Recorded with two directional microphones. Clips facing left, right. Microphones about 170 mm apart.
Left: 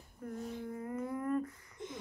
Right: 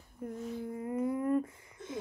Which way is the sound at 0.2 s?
15° right (ahead or behind).